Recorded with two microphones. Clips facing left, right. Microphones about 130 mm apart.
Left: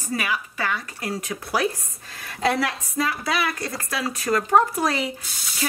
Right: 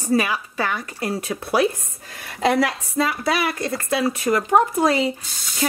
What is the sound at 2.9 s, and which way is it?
Speech, 25° right (ahead or behind).